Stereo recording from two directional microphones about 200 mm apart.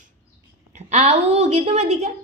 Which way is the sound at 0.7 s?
35° right (ahead or behind).